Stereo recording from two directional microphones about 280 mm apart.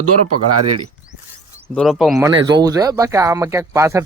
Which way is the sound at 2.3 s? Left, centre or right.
Centre.